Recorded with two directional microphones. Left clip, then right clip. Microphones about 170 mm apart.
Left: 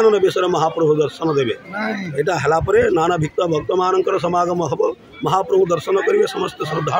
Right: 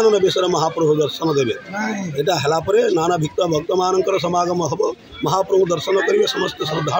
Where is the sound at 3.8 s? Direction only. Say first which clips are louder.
Left 1 dB; 30° left (ahead or behind).